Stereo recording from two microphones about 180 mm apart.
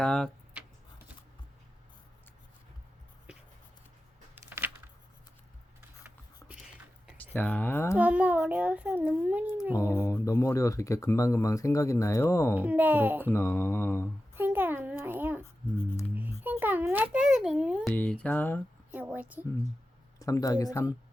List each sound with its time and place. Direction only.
0.0 s a sound: 5° left (ahead or behind)
4.4 s a sound: 10° right (ahead or behind)
7.3 s speech: 10° left (ahead or behind)
7.9 s a child's voice: 10° right (ahead or behind)
9.7 s speech: 15° left (ahead or behind)
12.5 s a child's voice: 10° right (ahead or behind)
13.2 s speech: 15° left (ahead or behind)
14.3 s a sound: 10° right (ahead or behind)
16.4 s a child's voice: 10° right (ahead or behind)
17.9 s speech: 5° left (ahead or behind)
18.9 s a child's voice: 10° right (ahead or behind)
20.1 s speech: 20° left (ahead or behind)